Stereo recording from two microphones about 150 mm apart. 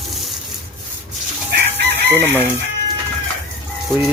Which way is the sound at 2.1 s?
15° right (ahead or behind).